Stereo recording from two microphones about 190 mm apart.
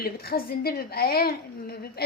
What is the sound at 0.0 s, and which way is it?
A woman's voice, 55° left (ahead or behind).